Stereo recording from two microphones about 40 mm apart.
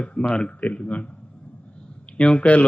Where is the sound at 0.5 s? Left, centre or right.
Left.